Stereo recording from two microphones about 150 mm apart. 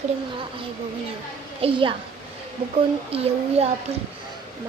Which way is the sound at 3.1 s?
40° right (ahead or behind).